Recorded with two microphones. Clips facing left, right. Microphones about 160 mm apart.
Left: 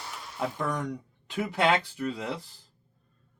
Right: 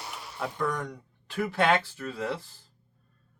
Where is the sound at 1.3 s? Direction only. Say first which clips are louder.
Even; 20° left (ahead or behind).